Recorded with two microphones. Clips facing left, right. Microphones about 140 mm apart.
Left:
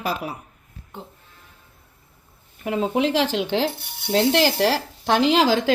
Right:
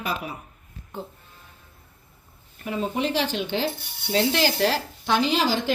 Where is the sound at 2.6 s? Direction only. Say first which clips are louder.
Left 5 dB; 85° left.